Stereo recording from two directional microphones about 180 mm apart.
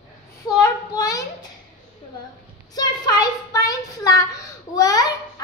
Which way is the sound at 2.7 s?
20° left (ahead or behind).